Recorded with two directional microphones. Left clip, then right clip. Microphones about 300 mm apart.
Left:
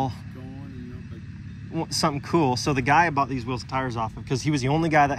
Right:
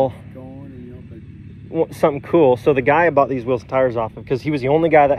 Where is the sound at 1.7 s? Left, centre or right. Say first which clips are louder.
Right 8 dB; centre.